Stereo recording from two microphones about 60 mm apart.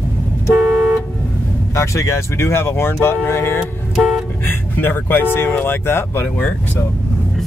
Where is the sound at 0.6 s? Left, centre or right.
Right.